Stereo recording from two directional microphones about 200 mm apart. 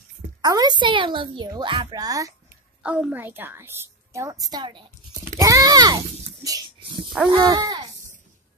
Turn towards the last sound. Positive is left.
turn(degrees=-20)  # may be behind; listen again after turning